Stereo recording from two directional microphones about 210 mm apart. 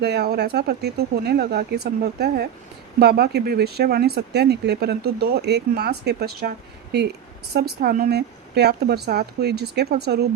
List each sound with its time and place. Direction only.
0.0 s speech: 50° right (ahead or behind)
7.5 s speech: 45° right (ahead or behind)